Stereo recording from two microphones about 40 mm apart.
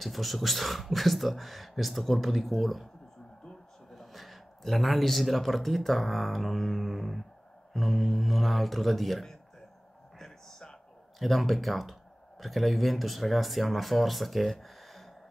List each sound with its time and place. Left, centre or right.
0.0 s speech: centre
3.9 s a man's voice: centre
11.1 s speech: centre